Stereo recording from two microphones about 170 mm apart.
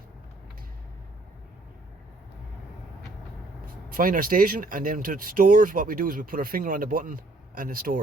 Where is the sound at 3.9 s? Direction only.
55° right (ahead or behind).